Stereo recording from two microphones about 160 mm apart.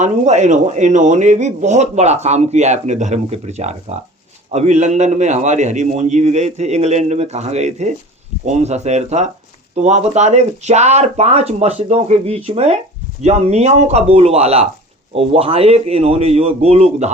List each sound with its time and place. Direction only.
0.0 s a man's voice: 50° right (ahead or behind)